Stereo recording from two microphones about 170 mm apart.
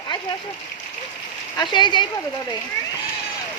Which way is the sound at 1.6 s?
25° left (ahead or behind).